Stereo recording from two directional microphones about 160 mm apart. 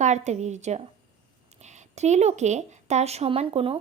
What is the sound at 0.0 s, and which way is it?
A woman's voice, 45° right (ahead or behind).